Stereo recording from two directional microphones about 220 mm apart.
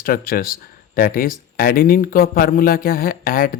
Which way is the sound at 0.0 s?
40° left (ahead or behind).